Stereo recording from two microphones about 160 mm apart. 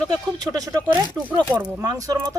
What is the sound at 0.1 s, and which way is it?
Speech, 25° right (ahead or behind).